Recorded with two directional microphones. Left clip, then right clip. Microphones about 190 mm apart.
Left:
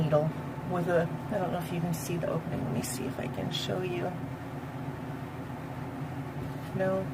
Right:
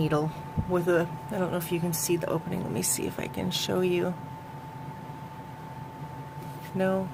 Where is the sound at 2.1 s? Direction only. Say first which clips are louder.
Right 4 dB; 55° right (ahead or behind).